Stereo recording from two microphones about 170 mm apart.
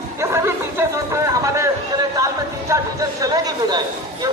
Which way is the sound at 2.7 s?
20° right (ahead or behind).